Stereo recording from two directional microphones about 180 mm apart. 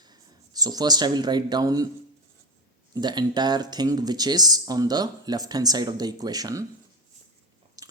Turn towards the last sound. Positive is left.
turn(degrees=-20)  # may be behind; listen again after turning